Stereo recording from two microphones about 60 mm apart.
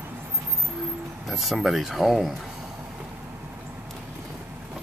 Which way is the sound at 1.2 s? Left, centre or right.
Centre.